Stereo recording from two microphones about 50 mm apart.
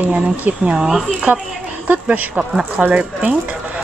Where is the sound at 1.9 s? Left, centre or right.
Right.